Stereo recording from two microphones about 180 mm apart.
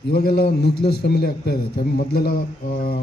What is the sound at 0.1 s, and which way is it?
A man's voice, 60° left (ahead or behind).